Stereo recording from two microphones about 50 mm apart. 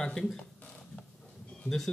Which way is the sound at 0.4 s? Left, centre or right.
Left.